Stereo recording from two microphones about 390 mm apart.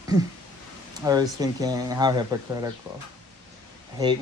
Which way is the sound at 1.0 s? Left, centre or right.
Centre.